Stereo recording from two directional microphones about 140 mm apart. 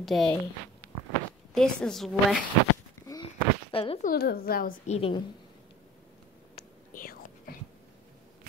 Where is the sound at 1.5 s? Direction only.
5° left (ahead or behind).